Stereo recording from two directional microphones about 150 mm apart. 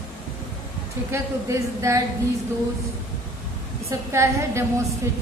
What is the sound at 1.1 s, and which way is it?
Speech, 20° right (ahead or behind).